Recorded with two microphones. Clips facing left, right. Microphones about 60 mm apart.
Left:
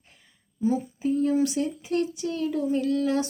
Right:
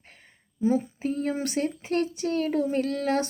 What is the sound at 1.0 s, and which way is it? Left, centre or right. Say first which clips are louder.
Speech: left 5 dB; right.